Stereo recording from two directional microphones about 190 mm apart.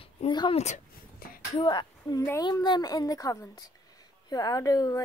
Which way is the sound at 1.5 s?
25° left (ahead or behind).